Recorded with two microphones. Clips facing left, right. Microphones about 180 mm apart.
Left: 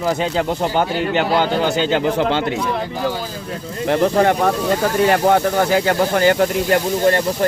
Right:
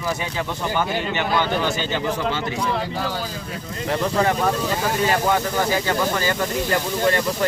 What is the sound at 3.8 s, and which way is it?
Speech, 60° left (ahead or behind).